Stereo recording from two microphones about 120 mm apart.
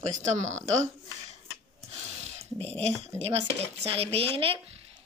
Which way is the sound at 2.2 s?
60° right (ahead or behind).